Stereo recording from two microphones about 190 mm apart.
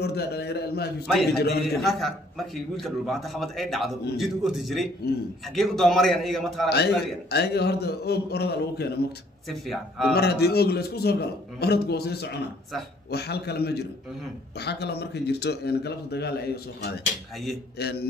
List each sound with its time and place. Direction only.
0.0 s a man's voice: 60° left (ahead or behind)
1.0 s a man's voice: centre (ahead or behind)
6.7 s a man's voice: 60° left (ahead or behind)
9.5 s a man's voice: centre (ahead or behind)
10.1 s a man's voice: 60° left (ahead or behind)